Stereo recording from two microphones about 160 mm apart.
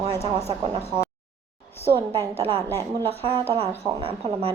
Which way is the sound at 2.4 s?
35° right (ahead or behind).